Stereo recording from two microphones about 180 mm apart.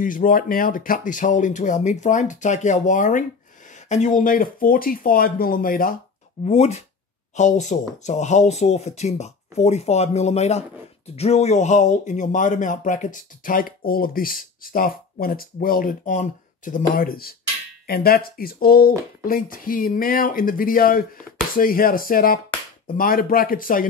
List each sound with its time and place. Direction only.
0.0 s speech: 50° left (ahead or behind)
6.4 s speech: 40° left (ahead or behind)